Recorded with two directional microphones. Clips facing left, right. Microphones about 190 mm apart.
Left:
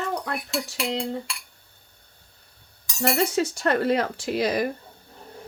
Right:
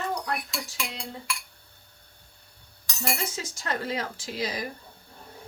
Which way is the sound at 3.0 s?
65° left (ahead or behind).